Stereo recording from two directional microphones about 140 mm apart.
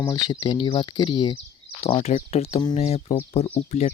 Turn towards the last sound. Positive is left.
turn(degrees=50)  # may be behind; listen again after turning